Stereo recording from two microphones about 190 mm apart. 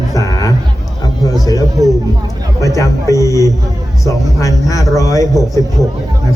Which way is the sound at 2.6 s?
15° left (ahead or behind).